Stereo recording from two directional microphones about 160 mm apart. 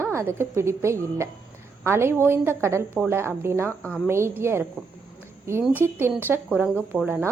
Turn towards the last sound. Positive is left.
turn(degrees=-10)  # may be behind; listen again after turning